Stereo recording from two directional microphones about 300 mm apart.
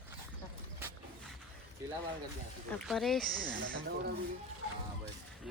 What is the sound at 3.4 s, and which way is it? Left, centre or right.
Speech, right.